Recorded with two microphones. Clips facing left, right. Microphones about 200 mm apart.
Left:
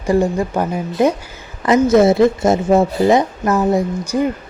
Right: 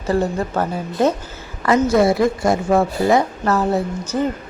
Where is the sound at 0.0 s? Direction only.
15° left (ahead or behind).